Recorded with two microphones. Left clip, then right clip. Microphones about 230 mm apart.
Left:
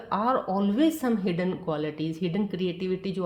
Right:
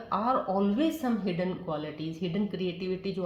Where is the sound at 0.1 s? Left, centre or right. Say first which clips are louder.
Left 2 dB; left.